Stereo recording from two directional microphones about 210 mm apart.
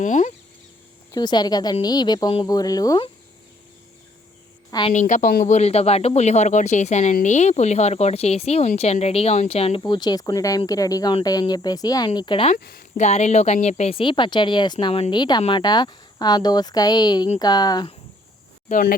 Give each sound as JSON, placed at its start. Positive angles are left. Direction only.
{"t": 0.0, "sound": "speech", "side_deg": 35}
{"t": 1.1, "sound": "speech", "side_deg": 20}
{"t": 4.7, "sound": "speech", "side_deg": 25}
{"t": 12.5, "sound": "speech", "side_deg": 45}
{"t": 13.1, "sound": "speech", "side_deg": 30}
{"t": 18.7, "sound": "speech", "side_deg": 40}